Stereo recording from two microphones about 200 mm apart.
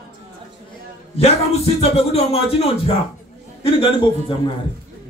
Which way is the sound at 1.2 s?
30° left (ahead or behind).